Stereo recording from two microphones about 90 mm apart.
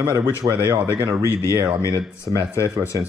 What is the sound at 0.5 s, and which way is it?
Speech, 30° right (ahead or behind).